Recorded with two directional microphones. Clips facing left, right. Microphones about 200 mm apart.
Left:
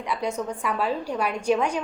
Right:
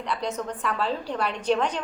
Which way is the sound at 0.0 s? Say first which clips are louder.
Left 2 dB; 10° left (ahead or behind).